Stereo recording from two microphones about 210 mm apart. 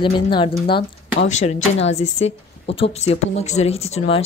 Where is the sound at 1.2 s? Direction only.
35° left (ahead or behind).